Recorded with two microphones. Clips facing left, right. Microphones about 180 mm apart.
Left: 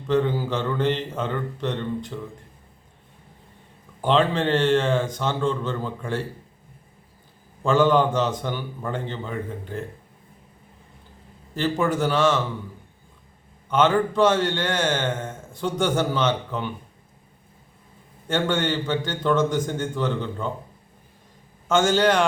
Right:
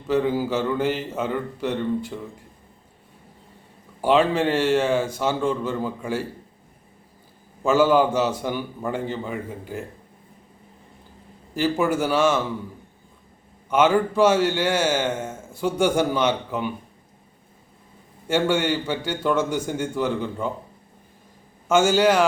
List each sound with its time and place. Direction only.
0.1 s a man's voice: 10° right (ahead or behind)
4.0 s a man's voice: 10° right (ahead or behind)
7.6 s a man's voice: 5° right (ahead or behind)
11.5 s a man's voice: 10° right (ahead or behind)
13.7 s a man's voice: 10° right (ahead or behind)
18.3 s a man's voice: 10° right (ahead or behind)
21.7 s a man's voice: 10° right (ahead or behind)